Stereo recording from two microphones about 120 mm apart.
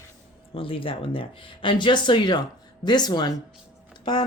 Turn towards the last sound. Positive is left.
turn(degrees=40)  # may be behind; listen again after turning